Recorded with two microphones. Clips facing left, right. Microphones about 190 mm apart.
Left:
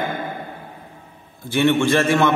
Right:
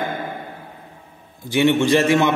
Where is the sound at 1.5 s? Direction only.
15° right (ahead or behind).